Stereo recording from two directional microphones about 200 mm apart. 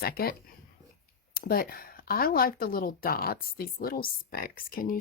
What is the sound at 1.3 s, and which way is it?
Speech, 50° left (ahead or behind).